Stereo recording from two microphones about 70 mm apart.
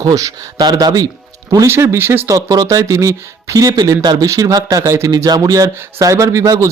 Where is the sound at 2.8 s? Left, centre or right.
Right.